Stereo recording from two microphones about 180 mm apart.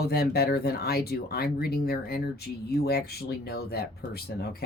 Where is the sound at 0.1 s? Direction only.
60° left (ahead or behind).